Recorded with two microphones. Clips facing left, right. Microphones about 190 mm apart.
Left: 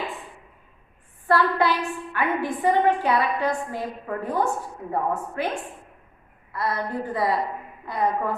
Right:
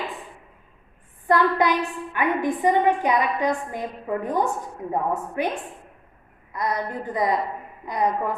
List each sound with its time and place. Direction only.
1.3 s a woman's voice: 15° right (ahead or behind)
6.5 s a woman's voice: 15° right (ahead or behind)